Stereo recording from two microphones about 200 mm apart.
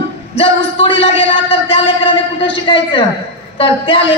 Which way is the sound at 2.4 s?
25° left (ahead or behind).